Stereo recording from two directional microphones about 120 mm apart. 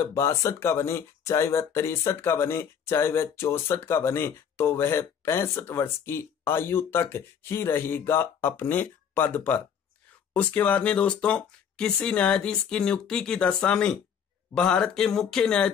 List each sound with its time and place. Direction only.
0.0 s speech: 20° left (ahead or behind)